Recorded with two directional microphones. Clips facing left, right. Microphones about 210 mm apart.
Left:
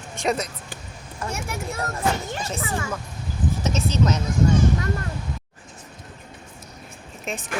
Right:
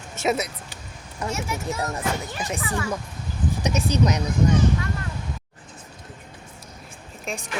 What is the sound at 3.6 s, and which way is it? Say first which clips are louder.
Speech: right 1 dB; 15° right (ahead or behind).